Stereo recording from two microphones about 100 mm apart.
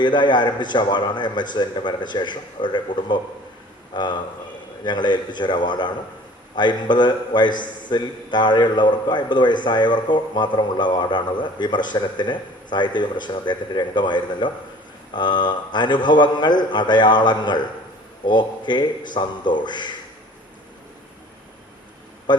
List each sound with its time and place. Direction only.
0.0 s a man's voice: 50° left (ahead or behind)
22.3 s a man's voice: 50° left (ahead or behind)